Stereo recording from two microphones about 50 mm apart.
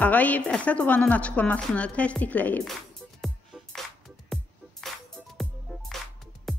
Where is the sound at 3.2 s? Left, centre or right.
Centre.